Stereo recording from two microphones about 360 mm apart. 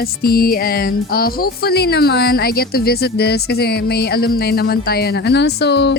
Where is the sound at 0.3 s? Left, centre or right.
Left.